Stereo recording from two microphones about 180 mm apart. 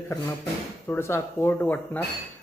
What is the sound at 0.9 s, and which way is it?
Speech, 15° left (ahead or behind).